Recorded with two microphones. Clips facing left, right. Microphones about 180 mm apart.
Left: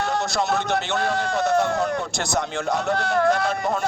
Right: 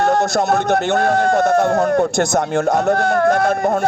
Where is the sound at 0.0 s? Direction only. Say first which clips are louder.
Right 8 dB; 45° right (ahead or behind).